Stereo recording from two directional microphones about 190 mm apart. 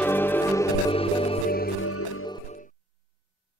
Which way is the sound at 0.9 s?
30° left (ahead or behind).